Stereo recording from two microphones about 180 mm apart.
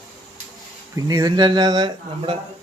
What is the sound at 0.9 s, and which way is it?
Cutlery, 20° right (ahead or behind).